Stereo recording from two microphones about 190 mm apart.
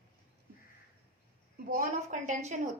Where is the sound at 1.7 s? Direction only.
40° right (ahead or behind).